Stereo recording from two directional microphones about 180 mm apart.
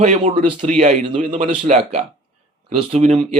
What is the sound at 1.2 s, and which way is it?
Speech, 45° right (ahead or behind).